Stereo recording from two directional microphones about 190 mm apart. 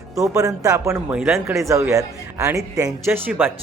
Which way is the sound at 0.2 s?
15° right (ahead or behind).